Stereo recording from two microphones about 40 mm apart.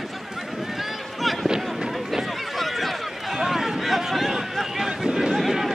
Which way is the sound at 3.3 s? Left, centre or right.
Centre.